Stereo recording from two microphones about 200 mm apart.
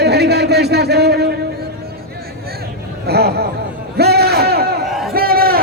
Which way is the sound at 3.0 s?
55° right (ahead or behind).